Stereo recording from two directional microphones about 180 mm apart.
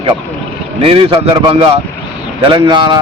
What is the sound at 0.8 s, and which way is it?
A man's voice, 30° right (ahead or behind).